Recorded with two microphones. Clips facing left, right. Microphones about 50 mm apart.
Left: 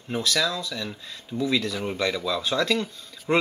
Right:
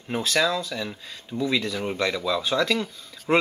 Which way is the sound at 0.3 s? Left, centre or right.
Right.